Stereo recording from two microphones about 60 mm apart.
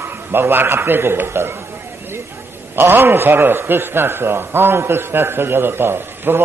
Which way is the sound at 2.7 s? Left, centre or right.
Right.